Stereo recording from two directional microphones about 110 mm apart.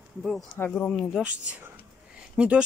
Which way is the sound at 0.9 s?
5° left (ahead or behind).